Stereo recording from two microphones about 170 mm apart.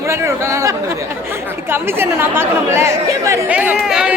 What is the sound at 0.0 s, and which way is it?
Chatter, 15° right (ahead or behind).